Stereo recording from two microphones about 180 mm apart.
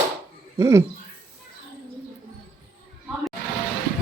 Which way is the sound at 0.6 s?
15° right (ahead or behind).